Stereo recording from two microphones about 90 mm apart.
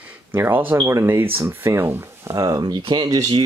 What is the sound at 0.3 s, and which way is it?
Speech, 25° right (ahead or behind).